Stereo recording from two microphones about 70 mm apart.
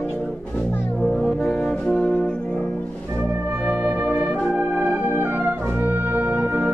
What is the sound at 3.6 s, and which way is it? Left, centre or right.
Music, centre.